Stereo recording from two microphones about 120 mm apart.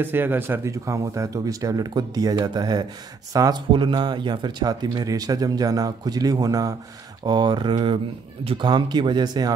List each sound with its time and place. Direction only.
0.0 s speech: 15° right (ahead or behind); by 9.5 s 35° right (ahead or behind)